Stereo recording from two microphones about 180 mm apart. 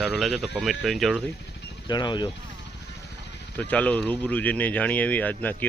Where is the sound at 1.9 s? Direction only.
25° left (ahead or behind).